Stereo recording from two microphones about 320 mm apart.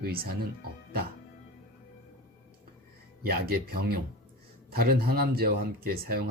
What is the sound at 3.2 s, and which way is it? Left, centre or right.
Speech, right.